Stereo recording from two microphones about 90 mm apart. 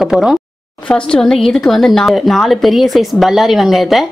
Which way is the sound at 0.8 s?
10° left (ahead or behind).